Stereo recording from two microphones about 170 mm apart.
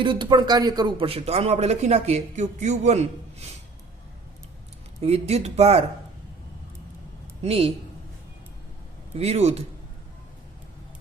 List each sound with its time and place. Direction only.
0.0 s speech: 30° right (ahead or behind)
4.9 s speech: 40° right (ahead or behind)
7.4 s speech: 35° right (ahead or behind)
9.1 s speech: 40° right (ahead or behind)